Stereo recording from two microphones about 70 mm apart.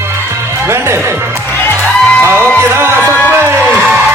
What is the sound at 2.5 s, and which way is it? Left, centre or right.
Music, right.